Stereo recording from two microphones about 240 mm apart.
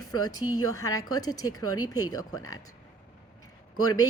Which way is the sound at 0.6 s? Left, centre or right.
Left.